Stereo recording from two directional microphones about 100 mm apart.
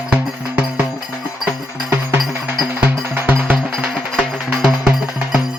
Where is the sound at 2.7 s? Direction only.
20° right (ahead or behind).